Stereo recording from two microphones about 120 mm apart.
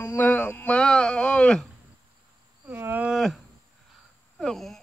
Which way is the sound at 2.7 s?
15° right (ahead or behind).